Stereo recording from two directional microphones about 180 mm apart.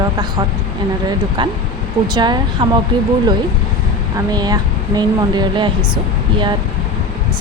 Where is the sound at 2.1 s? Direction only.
25° right (ahead or behind).